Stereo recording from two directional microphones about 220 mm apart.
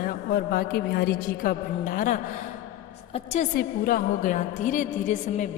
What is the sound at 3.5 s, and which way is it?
A woman's voice, 40° left (ahead or behind).